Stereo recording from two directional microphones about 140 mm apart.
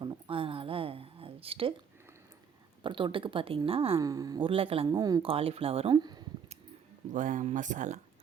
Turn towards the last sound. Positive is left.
turn(degrees=-60)  # may be behind; listen again after turning